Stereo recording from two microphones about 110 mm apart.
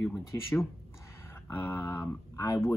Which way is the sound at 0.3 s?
25° left (ahead or behind).